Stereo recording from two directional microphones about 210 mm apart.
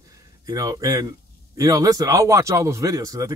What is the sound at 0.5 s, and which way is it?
Speech, 15° right (ahead or behind).